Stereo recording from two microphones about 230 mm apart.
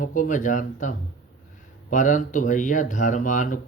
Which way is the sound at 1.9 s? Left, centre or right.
Left.